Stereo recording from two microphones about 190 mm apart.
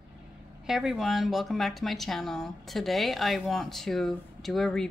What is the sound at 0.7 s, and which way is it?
Speech, centre (ahead or behind).